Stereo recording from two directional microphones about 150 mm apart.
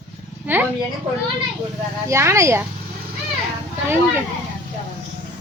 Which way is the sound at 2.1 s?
20° right (ahead or behind).